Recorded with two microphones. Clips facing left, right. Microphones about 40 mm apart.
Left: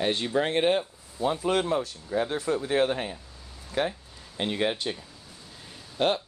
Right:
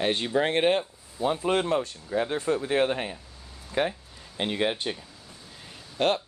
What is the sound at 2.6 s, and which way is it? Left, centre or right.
Speech, centre.